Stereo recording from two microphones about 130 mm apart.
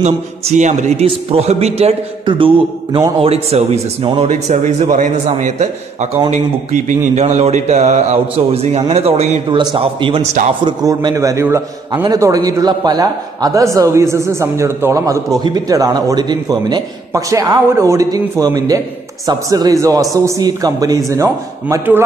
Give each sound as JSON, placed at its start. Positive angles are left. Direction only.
{"t": 0.6, "sound": "a man's voice", "side_deg": -60}
{"t": 2.2, "sound": "a sound", "side_deg": -40}
{"t": 3.2, "sound": "speech", "side_deg": -50}
{"t": 4.3, "sound": "a man's voice", "side_deg": -70}
{"t": 9.5, "sound": "a sound", "side_deg": -35}
{"t": 10.6, "sound": "a man's voice", "side_deg": -30}